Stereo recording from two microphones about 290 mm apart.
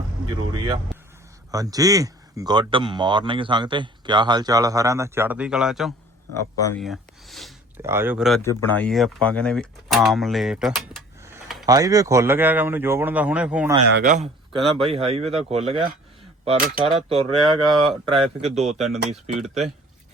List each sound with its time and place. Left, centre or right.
0.5 s speech: centre
6.3 s speech: centre
6.8 s speech: centre
13.9 s a man's voice: right
14.6 s speech: centre
14.8 s speech: centre